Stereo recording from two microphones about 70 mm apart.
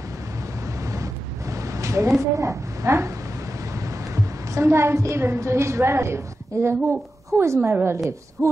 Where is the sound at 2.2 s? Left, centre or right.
Right.